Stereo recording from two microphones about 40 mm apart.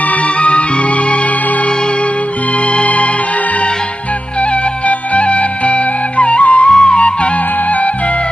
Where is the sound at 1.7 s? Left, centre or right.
Left.